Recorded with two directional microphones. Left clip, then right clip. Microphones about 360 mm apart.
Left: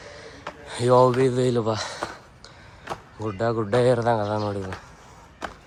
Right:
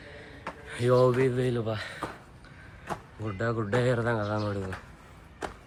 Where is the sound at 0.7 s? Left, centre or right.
Centre.